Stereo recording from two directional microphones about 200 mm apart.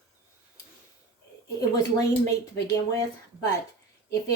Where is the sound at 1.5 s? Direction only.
15° left (ahead or behind).